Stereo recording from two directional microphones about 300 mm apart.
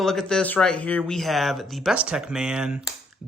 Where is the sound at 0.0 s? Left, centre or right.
Centre.